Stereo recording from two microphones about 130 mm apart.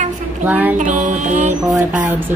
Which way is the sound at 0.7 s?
75° right (ahead or behind).